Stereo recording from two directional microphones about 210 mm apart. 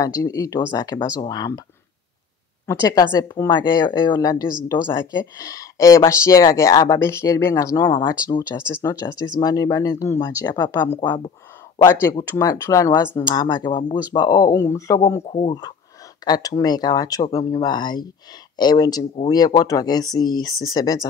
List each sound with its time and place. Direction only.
0.2 s speech: 15° left (ahead or behind)
2.6 s speech: 15° left (ahead or behind)
11.8 s speech: 10° left (ahead or behind)
16.4 s speech: 20° left (ahead or behind)